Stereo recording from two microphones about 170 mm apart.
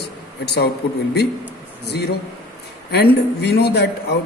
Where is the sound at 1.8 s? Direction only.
75° left (ahead or behind).